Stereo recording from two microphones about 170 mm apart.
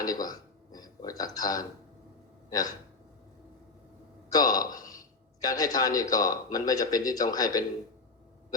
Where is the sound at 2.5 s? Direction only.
20° left (ahead or behind).